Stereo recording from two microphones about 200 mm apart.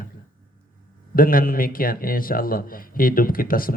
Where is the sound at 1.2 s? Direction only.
45° left (ahead or behind).